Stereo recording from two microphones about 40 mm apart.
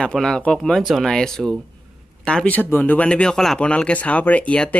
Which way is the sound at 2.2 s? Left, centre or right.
Left.